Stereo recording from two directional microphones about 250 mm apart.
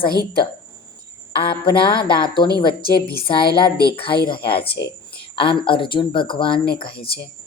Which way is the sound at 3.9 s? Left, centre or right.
Left.